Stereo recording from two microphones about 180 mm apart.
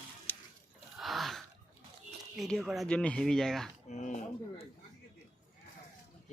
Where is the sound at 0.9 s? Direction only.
Centre (ahead or behind).